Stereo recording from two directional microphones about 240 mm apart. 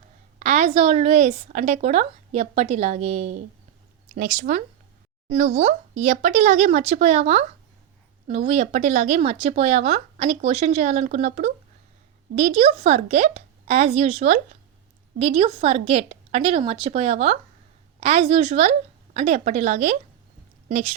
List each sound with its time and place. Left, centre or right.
0.3 s speech: right